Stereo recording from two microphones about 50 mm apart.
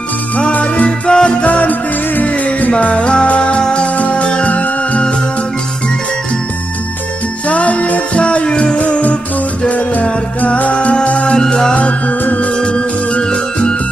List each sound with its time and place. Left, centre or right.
0.4 s music: left
7.4 s music: left
11.7 s music: left